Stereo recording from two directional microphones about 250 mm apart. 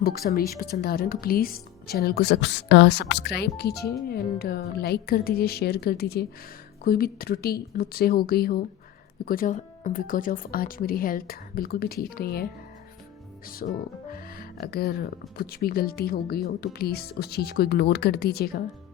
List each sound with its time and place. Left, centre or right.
0.0 s speech: left
13.6 s speech: left